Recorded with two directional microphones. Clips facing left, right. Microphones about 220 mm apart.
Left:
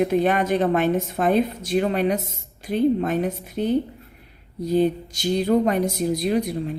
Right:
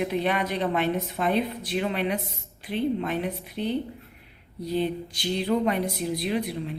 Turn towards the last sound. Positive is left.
turn(degrees=45)  # may be behind; listen again after turning